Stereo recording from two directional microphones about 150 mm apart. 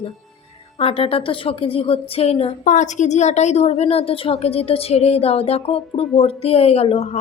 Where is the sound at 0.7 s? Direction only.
40° left (ahead or behind).